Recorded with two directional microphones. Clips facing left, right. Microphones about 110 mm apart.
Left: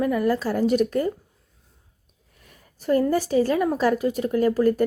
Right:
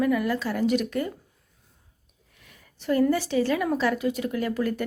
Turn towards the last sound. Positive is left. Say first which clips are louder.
# left 7 dB
turn(degrees=40)  # may be behind; listen again after turning